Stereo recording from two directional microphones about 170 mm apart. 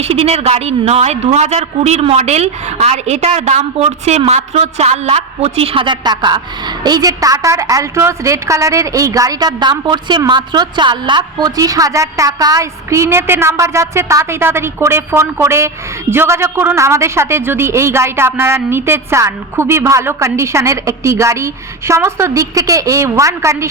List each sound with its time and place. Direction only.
0.0 s a woman's voice: 35° right (ahead or behind); by 23.6 s 15° right (ahead or behind)